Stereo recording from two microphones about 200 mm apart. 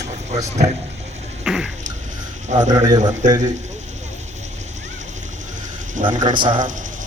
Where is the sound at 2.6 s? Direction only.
20° right (ahead or behind).